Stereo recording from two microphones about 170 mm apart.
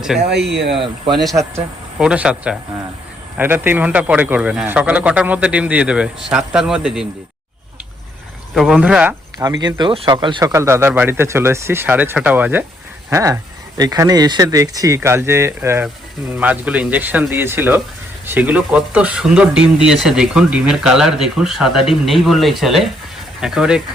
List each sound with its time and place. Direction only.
0.1 s speech: 5° right (ahead or behind)
0.7 s speech: 30° right (ahead or behind)
1.3 s speech: 20° right (ahead or behind)
2.0 s speech: 5° right (ahead or behind)
8.5 s speech: 5° right (ahead or behind)
9.4 s speech: 25° right (ahead or behind)
10.5 s speech: 15° right (ahead or behind)